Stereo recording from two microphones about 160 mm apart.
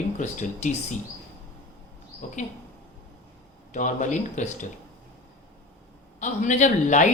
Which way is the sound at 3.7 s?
50° left (ahead or behind).